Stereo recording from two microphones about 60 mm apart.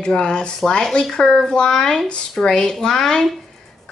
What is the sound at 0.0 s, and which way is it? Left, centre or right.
Speech, centre.